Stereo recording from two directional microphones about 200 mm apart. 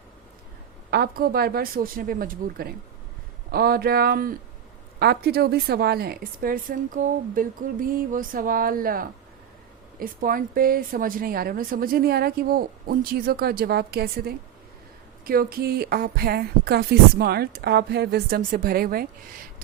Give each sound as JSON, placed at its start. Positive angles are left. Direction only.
{"t": 0.9, "sound": "a woman's voice", "side_deg": -50}